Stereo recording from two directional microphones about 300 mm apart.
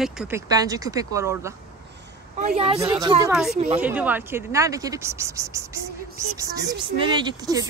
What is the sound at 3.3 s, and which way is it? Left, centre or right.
Speech, centre.